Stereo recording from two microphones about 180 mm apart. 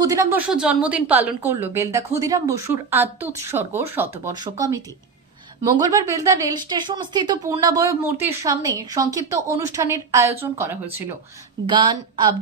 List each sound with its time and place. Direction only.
0.0 s a woman's voice: 20° right (ahead or behind)
0.5 s a woman's voice: 5° right (ahead or behind)
11.6 s a woman's voice: 25° right (ahead or behind)